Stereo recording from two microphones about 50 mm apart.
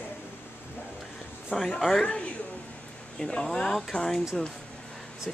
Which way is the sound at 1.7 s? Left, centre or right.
Centre.